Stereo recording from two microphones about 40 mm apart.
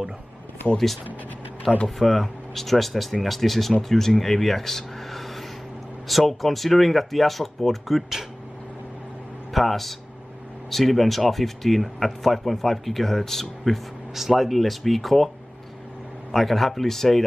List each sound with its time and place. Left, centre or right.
0.7 s speech: left
2.0 s speech: centre
9.5 s speech: centre
14.1 s speech: centre